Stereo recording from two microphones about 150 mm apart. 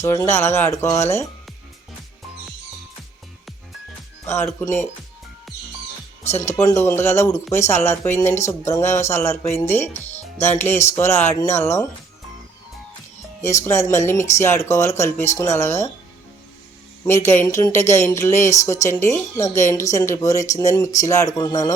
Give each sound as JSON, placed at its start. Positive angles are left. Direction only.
{"t": 0.0, "sound": "speech", "side_deg": 20}
{"t": 4.6, "sound": "speech", "side_deg": 15}
{"t": 6.2, "sound": "speech", "side_deg": 15}
{"t": 13.4, "sound": "speech", "side_deg": 20}
{"t": 17.2, "sound": "speech", "side_deg": 15}